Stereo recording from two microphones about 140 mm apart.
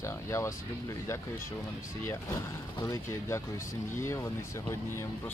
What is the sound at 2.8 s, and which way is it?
Speech, 20° left (ahead or behind).